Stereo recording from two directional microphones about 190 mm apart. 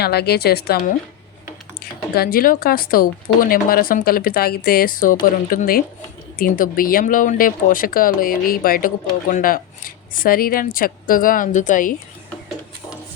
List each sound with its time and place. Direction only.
0.0 s a woman's voice: 60° left (ahead or behind)
2.1 s speech: 50° left (ahead or behind)